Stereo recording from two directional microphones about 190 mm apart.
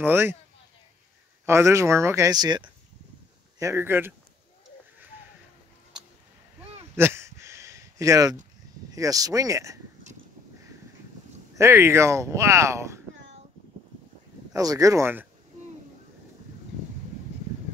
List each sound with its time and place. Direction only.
0.0 s speech: 10° right (ahead or behind)
1.4 s speech: 15° right (ahead or behind)
7.0 s a sound: 15° right (ahead or behind)
8.9 s speech: 20° right (ahead or behind)
11.5 s speech: 15° right (ahead or behind)
14.5 s speech: 20° right (ahead or behind)